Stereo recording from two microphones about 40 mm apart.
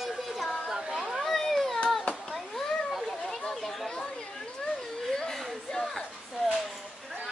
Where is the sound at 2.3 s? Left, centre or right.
Centre.